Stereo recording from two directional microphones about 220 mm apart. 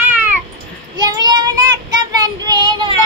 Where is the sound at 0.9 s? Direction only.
20° right (ahead or behind).